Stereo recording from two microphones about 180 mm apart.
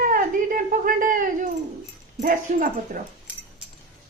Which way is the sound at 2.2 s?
50° right (ahead or behind).